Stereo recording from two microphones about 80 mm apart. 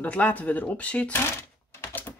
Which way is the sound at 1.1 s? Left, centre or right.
Left.